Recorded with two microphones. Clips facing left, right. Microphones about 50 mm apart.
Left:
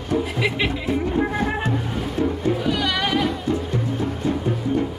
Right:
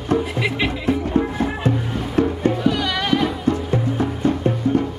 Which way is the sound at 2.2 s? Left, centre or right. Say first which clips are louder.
Right 4 dB; right.